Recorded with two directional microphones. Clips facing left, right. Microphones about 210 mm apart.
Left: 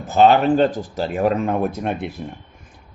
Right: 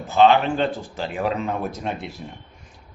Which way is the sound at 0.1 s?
45° left (ahead or behind).